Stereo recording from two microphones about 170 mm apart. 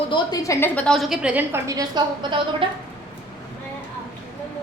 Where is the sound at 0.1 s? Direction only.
25° left (ahead or behind); by 1.9 s 20° right (ahead or behind).